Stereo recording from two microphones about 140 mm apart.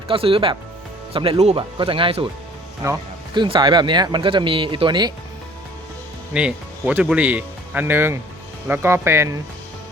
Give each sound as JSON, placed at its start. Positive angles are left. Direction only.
{"t": 0.1, "sound": "speech", "side_deg": -40}
{"t": 2.8, "sound": "speech", "side_deg": -20}
{"t": 3.3, "sound": "speech", "side_deg": -35}
{"t": 6.3, "sound": "speech", "side_deg": -10}